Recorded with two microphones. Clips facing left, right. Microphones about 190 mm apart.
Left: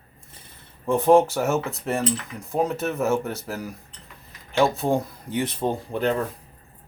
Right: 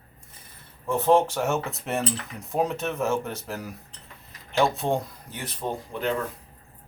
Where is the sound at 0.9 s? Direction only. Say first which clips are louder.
Left 4 dB; 15° left (ahead or behind).